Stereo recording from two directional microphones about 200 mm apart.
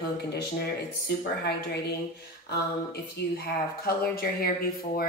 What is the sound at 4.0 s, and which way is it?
A woman's voice, 50° left (ahead or behind).